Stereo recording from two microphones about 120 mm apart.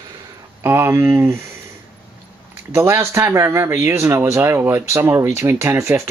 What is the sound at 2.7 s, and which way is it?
Speech, 20° right (ahead or behind).